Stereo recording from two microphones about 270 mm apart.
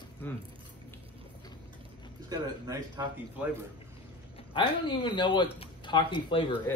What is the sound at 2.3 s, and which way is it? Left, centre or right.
Speech, centre.